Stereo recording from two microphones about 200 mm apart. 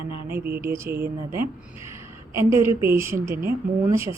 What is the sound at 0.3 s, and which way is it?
Speech, 10° right (ahead or behind).